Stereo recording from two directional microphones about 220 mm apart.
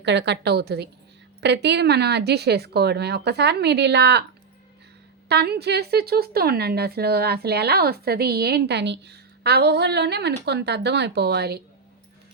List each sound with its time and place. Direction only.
0.0 s a woman's voice: 50° right (ahead or behind)
5.3 s a woman's voice: 50° right (ahead or behind)